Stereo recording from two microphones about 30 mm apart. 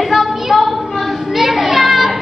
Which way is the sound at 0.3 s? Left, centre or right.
Centre.